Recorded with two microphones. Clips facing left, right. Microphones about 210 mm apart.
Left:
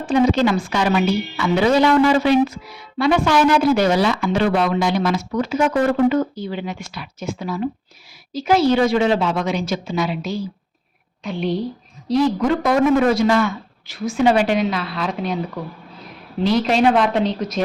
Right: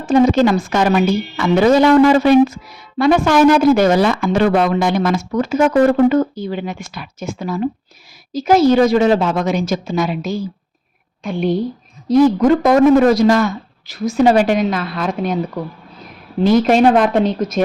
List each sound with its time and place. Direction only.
0.0 s speech: 45° right (ahead or behind)
16.4 s speech: 50° right (ahead or behind)